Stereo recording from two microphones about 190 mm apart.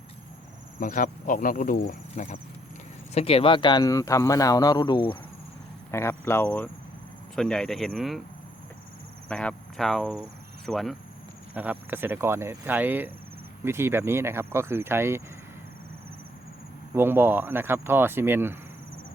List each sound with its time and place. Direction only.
0.8 s insect: 45° left (ahead or behind)
3.2 s speech: 30° left (ahead or behind)
5.9 s speech: 15° left (ahead or behind)
9.3 s speech: 5° left (ahead or behind); by 15.2 s 15° right (ahead or behind)
16.9 s speech: 10° right (ahead or behind)